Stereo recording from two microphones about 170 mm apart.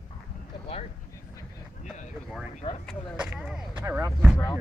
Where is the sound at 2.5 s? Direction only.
40° left (ahead or behind).